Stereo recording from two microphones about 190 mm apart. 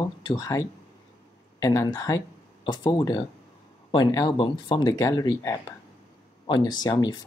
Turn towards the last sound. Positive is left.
turn(degrees=20)  # may be behind; listen again after turning